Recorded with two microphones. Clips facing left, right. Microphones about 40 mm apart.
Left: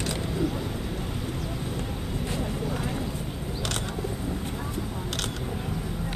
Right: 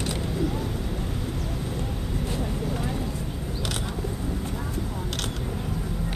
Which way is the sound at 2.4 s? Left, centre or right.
Centre.